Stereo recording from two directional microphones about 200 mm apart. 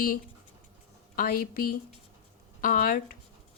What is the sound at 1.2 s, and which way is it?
A woman's voice, 45° left (ahead or behind).